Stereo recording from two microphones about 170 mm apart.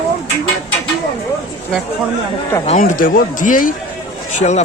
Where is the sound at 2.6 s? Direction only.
50° left (ahead or behind).